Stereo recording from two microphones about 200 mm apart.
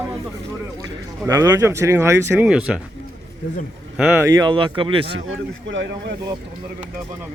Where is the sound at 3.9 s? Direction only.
10° right (ahead or behind); by 5.1 s 25° right (ahead or behind).